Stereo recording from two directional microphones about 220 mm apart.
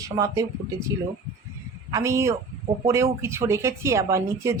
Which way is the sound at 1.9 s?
15° right (ahead or behind).